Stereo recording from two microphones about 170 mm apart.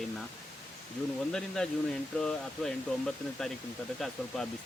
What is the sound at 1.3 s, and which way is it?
Speech, 5° left (ahead or behind).